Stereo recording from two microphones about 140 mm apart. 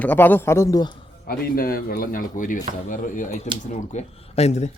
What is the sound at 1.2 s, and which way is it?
Speech, 90° left.